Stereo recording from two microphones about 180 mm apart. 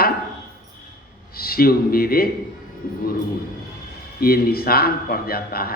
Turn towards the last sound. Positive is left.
turn(degrees=55)  # may be behind; listen again after turning